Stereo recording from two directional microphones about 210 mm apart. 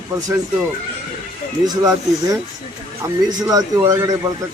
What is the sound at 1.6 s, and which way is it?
A man's voice, 20° right (ahead or behind).